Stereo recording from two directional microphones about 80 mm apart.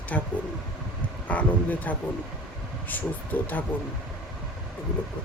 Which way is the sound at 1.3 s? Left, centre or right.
Centre.